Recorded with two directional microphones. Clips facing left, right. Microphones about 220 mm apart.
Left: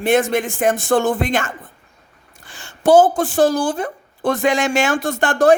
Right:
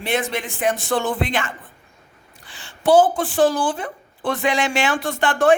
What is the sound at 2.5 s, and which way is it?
Speech, 45° left (ahead or behind).